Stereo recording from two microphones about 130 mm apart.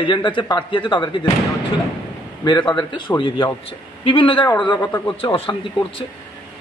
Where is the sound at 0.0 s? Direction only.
40° left (ahead or behind).